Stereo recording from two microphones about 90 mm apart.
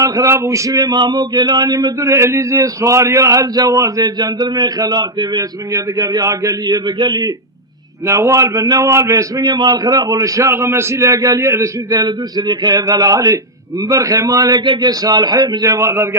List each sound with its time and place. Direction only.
0.0 s speech: 35° right (ahead or behind); by 7.3 s 55° right (ahead or behind)
8.0 s a man's voice: 35° right (ahead or behind)
9.4 s speech: 55° right (ahead or behind)
10.5 s a man's voice: 30° right (ahead or behind)
14.6 s speech: 60° right (ahead or behind); by 16.0 s 35° right (ahead or behind)